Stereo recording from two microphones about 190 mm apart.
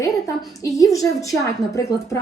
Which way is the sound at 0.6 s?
15° left (ahead or behind).